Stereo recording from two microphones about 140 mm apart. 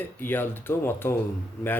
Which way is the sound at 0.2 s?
15° left (ahead or behind).